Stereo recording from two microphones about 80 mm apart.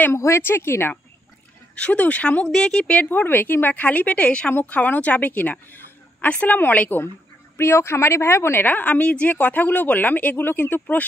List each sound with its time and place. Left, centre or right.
0.1 s speech: left
1.8 s a woman's voice: centre